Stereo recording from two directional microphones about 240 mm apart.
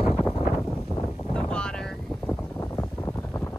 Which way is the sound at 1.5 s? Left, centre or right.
Centre.